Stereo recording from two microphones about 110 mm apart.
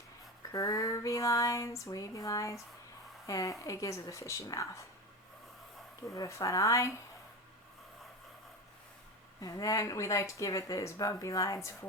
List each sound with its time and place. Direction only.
0.5 s female singing: 30° left (ahead or behind)
3.2 s speech: 30° left (ahead or behind)
6.1 s speech: 25° left (ahead or behind)
9.4 s speech: 35° left (ahead or behind)